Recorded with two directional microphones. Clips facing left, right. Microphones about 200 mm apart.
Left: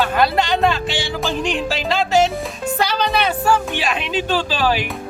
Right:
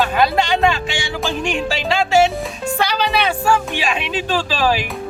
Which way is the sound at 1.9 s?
10° right (ahead or behind).